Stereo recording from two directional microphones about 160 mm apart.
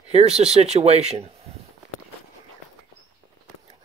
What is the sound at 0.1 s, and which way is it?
Speech, 40° right (ahead or behind).